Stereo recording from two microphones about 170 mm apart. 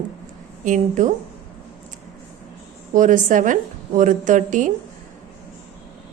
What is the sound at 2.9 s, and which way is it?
A woman's voice, 50° right (ahead or behind).